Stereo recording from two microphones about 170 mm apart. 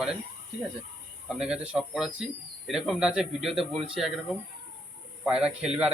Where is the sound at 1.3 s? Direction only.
5° right (ahead or behind).